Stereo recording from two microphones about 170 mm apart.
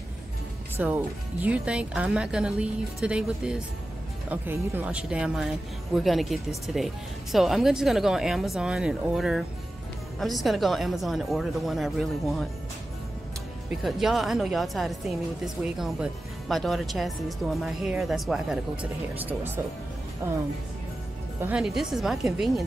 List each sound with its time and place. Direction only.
0.8 s a woman's voice: 10° right (ahead or behind)
13.7 s a woman's voice: centre (ahead or behind)